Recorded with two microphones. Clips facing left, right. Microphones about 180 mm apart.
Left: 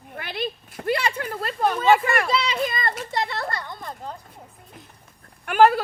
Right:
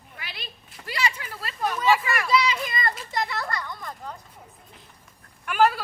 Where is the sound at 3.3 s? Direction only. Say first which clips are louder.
Left 1 dB; 30° left (ahead or behind).